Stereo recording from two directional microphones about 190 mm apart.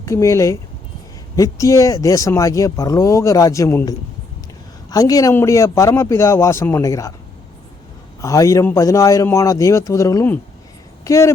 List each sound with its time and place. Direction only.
0.0 s speech: 15° left (ahead or behind)
8.2 s speech: 15° left (ahead or behind)